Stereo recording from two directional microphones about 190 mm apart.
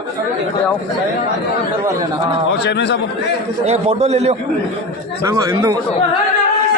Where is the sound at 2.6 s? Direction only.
65° left (ahead or behind).